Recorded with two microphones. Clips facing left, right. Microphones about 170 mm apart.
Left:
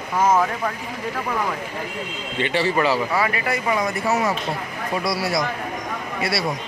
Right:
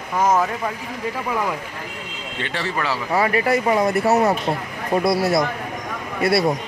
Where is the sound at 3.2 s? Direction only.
35° right (ahead or behind).